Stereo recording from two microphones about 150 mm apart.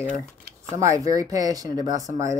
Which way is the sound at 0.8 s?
25° right (ahead or behind).